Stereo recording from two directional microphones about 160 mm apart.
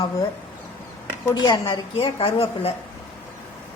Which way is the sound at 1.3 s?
25° left (ahead or behind).